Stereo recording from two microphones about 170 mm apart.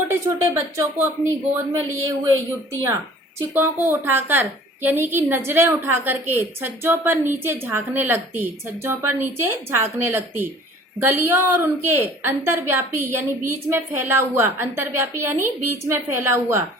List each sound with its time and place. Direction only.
0.4 s speech: 15° right (ahead or behind)